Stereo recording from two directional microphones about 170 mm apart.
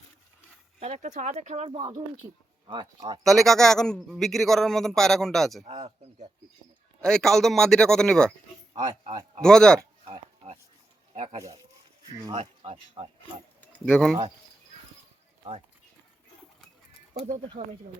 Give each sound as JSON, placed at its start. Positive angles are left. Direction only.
{"t": 0.8, "sound": "speech", "side_deg": -40}
{"t": 2.2, "sound": "speech", "side_deg": -25}
{"t": 3.2, "sound": "a man's voice", "side_deg": 0}
{"t": 5.7, "sound": "speech", "side_deg": -35}
{"t": 7.0, "sound": "a man's voice", "side_deg": 5}
{"t": 8.7, "sound": "speech", "side_deg": -20}
{"t": 9.4, "sound": "a man's voice", "side_deg": 5}
{"t": 10.1, "sound": "a sound", "side_deg": -35}
{"t": 11.1, "sound": "speech", "side_deg": -35}
{"t": 13.6, "sound": "speech", "side_deg": 5}
{"t": 17.2, "sound": "speech", "side_deg": -45}